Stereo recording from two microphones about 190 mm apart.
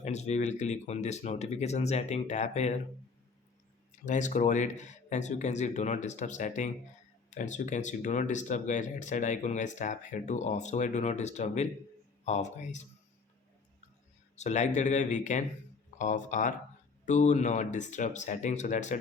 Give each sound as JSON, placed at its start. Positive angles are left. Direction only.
{"t": 0.0, "sound": "speech", "side_deg": 35}
{"t": 4.0, "sound": "speech", "side_deg": 40}
{"t": 14.3, "sound": "speech", "side_deg": 40}